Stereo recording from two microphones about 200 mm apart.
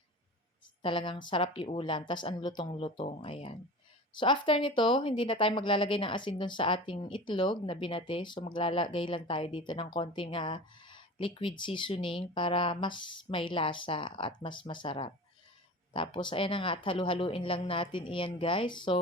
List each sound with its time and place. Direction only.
0.8 s speech: 25° left (ahead or behind)